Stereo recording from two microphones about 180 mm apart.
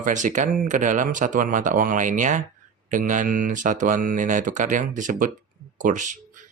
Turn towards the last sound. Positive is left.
turn(degrees=-45)  # may be behind; listen again after turning